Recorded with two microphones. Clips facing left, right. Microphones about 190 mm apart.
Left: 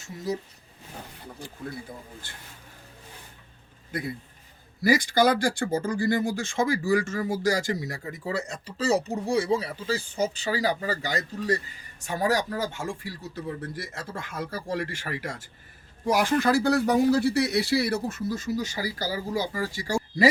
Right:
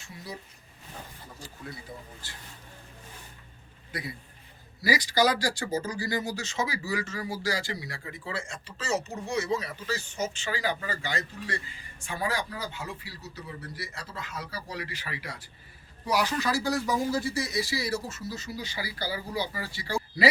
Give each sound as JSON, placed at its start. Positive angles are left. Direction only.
{"t": 2.2, "sound": "speech", "side_deg": 50}
{"t": 3.9, "sound": "speech", "side_deg": 50}